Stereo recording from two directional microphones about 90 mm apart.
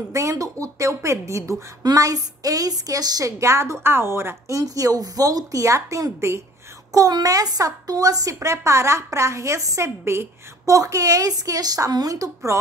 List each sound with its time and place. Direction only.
0.1 s a woman's voice: 35° right (ahead or behind)